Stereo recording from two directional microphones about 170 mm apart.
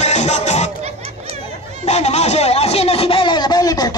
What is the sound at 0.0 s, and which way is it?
Music, 40° left (ahead or behind).